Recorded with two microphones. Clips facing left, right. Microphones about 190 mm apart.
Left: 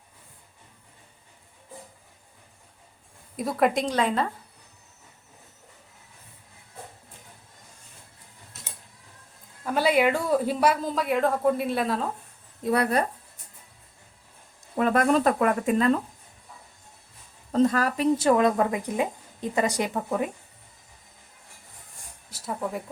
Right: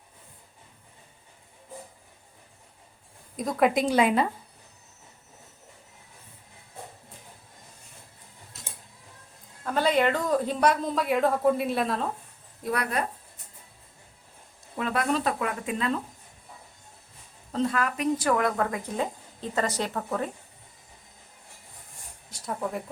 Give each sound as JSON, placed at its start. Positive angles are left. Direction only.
{"t": 3.3, "sound": "a woman's voice", "side_deg": 5}
{"t": 3.8, "sound": "a woman's voice", "side_deg": -10}
{"t": 9.6, "sound": "a woman's voice", "side_deg": 10}
{"t": 12.6, "sound": "speech", "side_deg": 30}
{"t": 14.8, "sound": "speech", "side_deg": 50}
{"t": 17.5, "sound": "a woman's voice", "side_deg": 40}
{"t": 22.3, "sound": "speech", "side_deg": 5}